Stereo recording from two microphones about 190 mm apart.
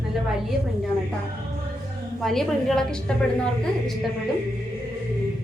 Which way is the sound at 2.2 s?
Centre (ahead or behind).